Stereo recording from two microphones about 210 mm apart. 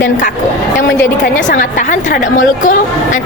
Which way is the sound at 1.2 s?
45° left (ahead or behind).